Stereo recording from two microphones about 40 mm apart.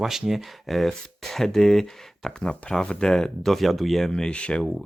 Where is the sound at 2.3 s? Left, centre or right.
Left.